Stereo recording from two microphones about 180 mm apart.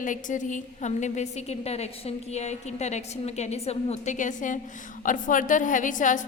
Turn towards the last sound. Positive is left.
turn(degrees=45)  # may be behind; listen again after turning